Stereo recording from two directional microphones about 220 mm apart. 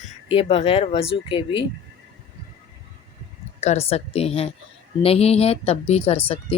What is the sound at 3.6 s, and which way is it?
Speech, 30° left (ahead or behind).